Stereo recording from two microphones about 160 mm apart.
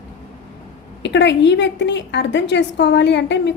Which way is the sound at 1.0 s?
90° left.